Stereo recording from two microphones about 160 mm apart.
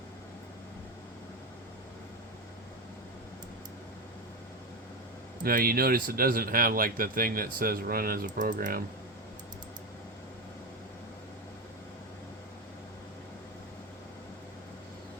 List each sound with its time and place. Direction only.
5.4 s speech: 60° right (ahead or behind)